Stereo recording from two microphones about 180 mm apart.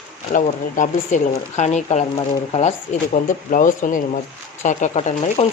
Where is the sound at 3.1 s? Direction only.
45° left (ahead or behind).